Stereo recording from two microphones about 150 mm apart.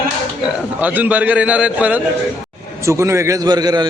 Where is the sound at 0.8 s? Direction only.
10° right (ahead or behind).